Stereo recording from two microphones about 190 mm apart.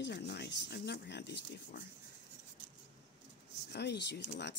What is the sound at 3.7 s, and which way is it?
Speech, 65° left (ahead or behind).